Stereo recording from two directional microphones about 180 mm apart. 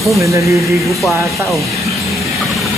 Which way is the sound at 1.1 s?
15° right (ahead or behind).